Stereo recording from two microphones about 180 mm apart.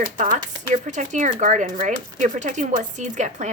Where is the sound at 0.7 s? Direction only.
40° right (ahead or behind).